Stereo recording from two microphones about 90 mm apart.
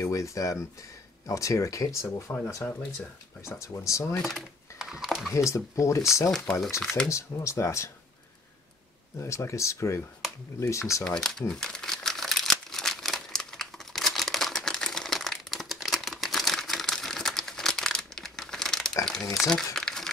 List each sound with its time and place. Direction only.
0.1 s speech: 35° left (ahead or behind)
4.2 s a sound: centre (ahead or behind)
5.3 s speech: 35° left (ahead or behind)
6.8 s speech: 5° left (ahead or behind)
7.1 s speech: 35° left (ahead or behind)
9.2 s speech: 30° left (ahead or behind)
11.1 s crumpling: 5° left (ahead or behind)